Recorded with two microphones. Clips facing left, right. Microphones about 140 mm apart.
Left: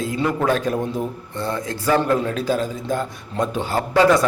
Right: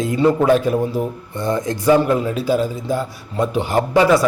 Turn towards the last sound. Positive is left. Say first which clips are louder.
# right 3 dB
turn(degrees=-15)  # may be behind; listen again after turning